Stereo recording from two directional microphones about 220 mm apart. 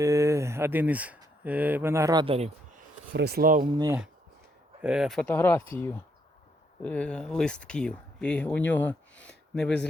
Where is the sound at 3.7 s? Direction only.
15° right (ahead or behind).